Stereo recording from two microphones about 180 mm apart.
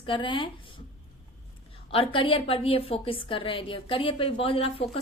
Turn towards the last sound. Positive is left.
turn(degrees=30)  # may be behind; listen again after turning